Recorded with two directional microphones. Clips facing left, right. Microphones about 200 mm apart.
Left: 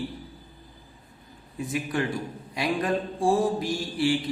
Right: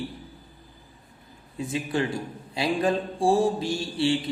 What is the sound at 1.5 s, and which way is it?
Mantra, 25° right (ahead or behind).